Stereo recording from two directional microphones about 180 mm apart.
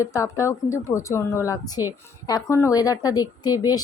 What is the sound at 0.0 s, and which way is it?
A woman's voice, 20° left (ahead or behind).